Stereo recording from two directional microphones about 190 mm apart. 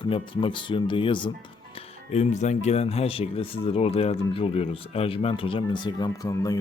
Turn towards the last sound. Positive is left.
turn(degrees=20)  # may be behind; listen again after turning